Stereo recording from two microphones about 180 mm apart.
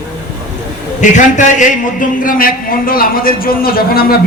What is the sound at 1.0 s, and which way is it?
A man's voice, 45° left (ahead or behind).